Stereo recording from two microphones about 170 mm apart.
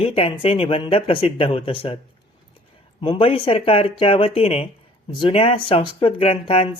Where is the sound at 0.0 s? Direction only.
35° left (ahead or behind).